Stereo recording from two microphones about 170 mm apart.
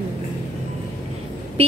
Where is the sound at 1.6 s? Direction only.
35° right (ahead or behind).